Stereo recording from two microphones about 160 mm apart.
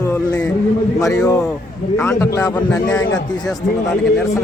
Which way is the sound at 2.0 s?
15° left (ahead or behind).